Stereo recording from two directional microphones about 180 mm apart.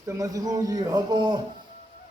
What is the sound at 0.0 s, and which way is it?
A man's voice, 15° right (ahead or behind).